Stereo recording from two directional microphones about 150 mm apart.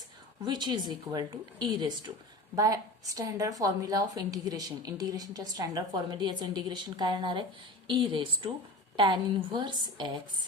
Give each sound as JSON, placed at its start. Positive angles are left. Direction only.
{"t": 0.4, "sound": "a woman's voice", "side_deg": -30}